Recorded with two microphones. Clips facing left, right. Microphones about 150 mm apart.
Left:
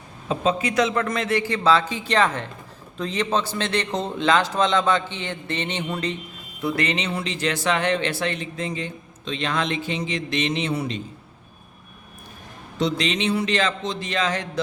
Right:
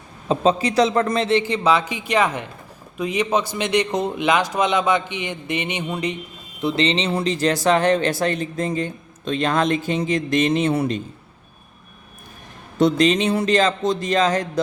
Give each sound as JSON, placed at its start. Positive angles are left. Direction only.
{"t": 0.3, "sound": "a man's voice", "side_deg": -35}
{"t": 12.8, "sound": "speech", "side_deg": -45}